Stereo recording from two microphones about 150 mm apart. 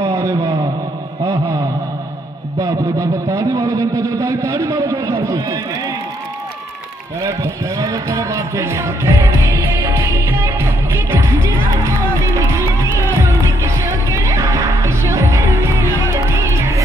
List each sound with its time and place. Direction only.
0.0 s a sound: 20° right (ahead or behind)
2.6 s a man's voice: 20° right (ahead or behind)
7.2 s music: 20° right (ahead or behind)